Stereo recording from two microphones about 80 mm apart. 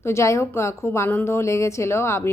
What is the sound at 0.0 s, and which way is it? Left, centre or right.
A woman's voice, left.